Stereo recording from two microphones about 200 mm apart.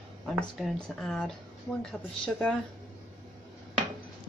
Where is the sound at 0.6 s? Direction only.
Centre (ahead or behind).